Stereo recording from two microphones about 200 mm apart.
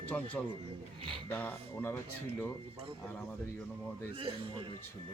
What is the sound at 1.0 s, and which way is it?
Speech, 25° right (ahead or behind).